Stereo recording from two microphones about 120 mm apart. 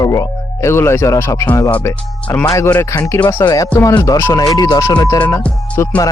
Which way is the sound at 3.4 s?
35° left (ahead or behind).